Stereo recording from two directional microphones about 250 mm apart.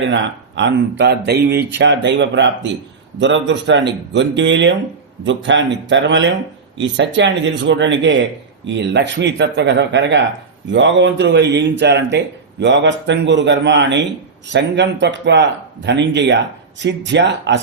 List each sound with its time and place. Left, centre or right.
0.1 s speech: right